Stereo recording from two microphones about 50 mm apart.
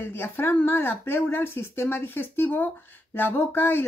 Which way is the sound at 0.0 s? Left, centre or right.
Left.